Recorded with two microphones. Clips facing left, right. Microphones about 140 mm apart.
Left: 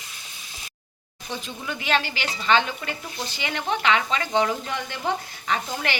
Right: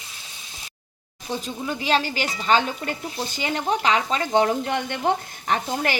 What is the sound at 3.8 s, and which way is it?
Sizzle, 35° right (ahead or behind).